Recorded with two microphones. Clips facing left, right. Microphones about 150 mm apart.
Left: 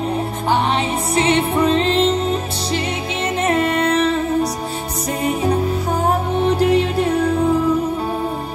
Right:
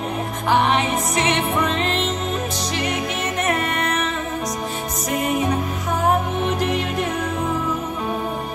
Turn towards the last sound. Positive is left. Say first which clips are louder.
# left 6 dB
turn(degrees=35)  # may be behind; listen again after turning